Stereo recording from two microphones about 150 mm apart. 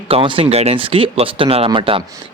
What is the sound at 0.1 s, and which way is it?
Speech, 35° right (ahead or behind).